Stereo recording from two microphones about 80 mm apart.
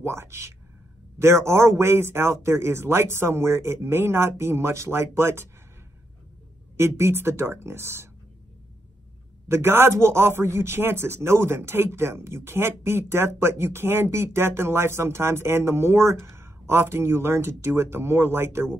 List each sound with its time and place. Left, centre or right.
0.0 s speech: right
6.8 s speech: right
9.5 s speech: right